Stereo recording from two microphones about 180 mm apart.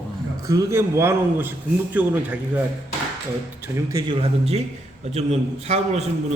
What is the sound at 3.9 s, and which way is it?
Speech, 20° right (ahead or behind).